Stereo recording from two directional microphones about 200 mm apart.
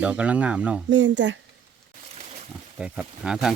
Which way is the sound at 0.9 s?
65° right (ahead or behind).